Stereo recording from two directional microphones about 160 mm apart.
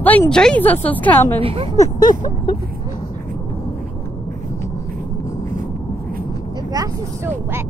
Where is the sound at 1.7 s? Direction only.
25° left (ahead or behind).